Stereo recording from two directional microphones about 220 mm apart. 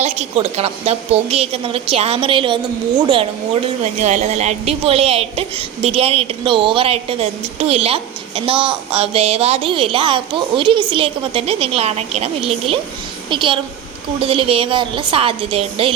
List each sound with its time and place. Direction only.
0.0 s a woman's voice: 30° right (ahead or behind)